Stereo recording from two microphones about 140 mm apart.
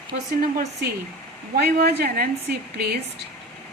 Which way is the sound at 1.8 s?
90° right.